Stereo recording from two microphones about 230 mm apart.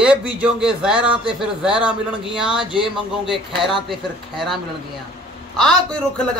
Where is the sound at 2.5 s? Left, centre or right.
Right.